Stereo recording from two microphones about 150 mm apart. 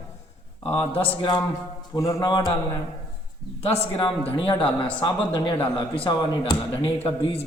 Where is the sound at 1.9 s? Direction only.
20° left (ahead or behind).